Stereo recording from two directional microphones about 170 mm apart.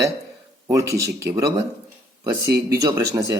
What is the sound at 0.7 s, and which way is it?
A man's voice, 20° right (ahead or behind).